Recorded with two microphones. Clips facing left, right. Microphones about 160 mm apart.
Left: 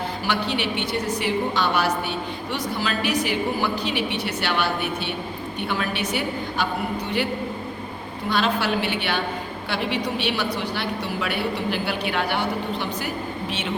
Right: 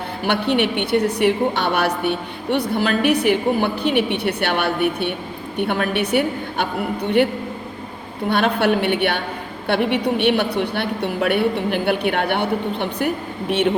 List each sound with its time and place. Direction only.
0.3 s a woman's voice: 60° right (ahead or behind)
8.3 s a woman's voice: 60° right (ahead or behind)